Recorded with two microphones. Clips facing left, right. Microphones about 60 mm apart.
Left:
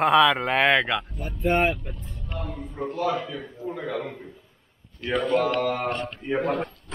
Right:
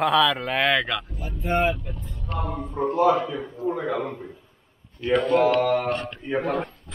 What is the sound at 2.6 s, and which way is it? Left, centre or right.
Speech, right.